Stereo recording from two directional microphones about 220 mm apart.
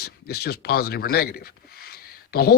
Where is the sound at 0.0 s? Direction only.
45° left (ahead or behind).